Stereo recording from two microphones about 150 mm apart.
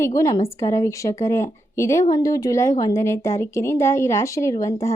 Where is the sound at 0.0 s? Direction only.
20° left (ahead or behind).